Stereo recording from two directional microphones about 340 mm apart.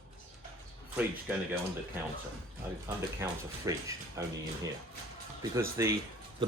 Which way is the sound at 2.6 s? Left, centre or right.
Centre.